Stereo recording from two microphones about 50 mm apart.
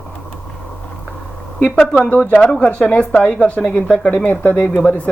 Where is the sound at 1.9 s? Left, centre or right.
Left.